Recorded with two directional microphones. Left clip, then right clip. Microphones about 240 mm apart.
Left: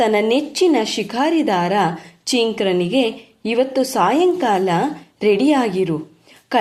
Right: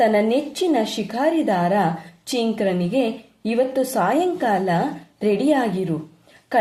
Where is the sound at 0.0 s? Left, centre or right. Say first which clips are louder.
Left 2 dB; left.